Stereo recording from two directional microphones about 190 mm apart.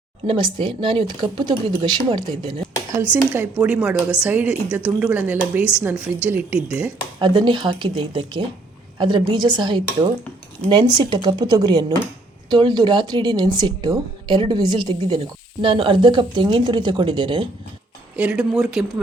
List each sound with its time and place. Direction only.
0.3 s speech: 25° right (ahead or behind)
2.9 s a woman's voice: 10° right (ahead or behind)
7.2 s speech: 25° right (ahead or behind)
18.2 s speech: 5° right (ahead or behind)